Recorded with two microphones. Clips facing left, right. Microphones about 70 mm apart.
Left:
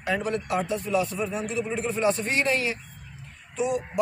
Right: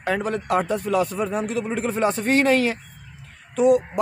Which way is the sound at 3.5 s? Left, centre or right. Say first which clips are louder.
Right 10 dB; right.